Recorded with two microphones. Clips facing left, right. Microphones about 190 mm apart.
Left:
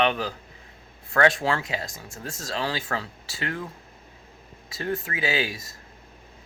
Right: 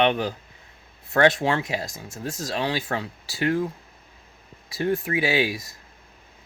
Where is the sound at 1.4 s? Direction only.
25° right (ahead or behind).